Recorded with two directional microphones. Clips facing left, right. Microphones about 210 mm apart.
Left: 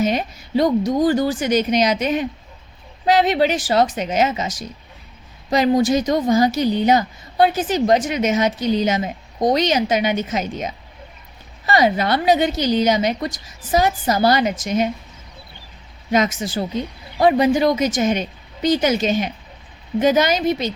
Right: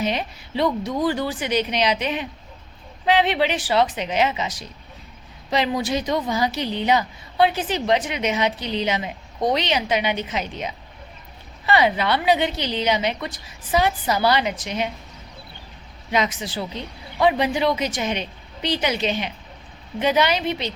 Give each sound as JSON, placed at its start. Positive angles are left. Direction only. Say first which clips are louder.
{"t": 0.0, "sound": "speech", "louder": "left 5 dB", "side_deg": 45}
{"t": 16.1, "sound": "speech", "louder": "left 5 dB", "side_deg": 45}